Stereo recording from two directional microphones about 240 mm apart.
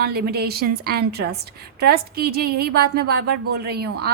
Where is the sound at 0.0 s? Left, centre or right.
Right.